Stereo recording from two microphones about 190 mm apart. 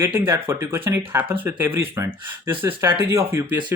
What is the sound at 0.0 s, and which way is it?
Speech, 15° right (ahead or behind).